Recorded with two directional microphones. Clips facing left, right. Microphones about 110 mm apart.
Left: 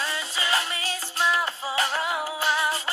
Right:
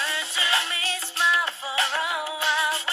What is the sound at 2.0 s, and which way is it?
Music, 30° left (ahead or behind).